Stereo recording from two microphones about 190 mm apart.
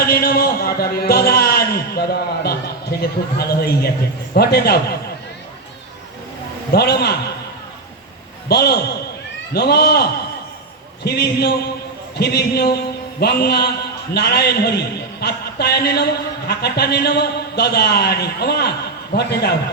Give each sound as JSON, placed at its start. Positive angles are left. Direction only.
{"t": 0.1, "sound": "a man's voice", "side_deg": 50}
{"t": 6.7, "sound": "a man's voice", "side_deg": 60}
{"t": 8.4, "sound": "a man's voice", "side_deg": 55}
{"t": 12.1, "sound": "a sound", "side_deg": 60}
{"t": 14.1, "sound": "a man's voice", "side_deg": 60}